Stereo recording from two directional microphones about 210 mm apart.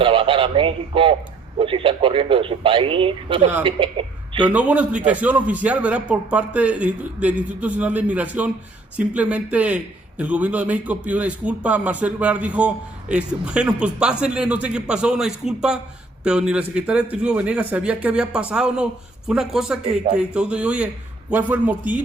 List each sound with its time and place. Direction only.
0.0 s a man's voice: 25° right (ahead or behind)
4.4 s a man's voice: 5° right (ahead or behind)